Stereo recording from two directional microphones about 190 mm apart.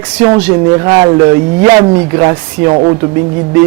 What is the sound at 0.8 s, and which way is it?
Speech, 20° right (ahead or behind).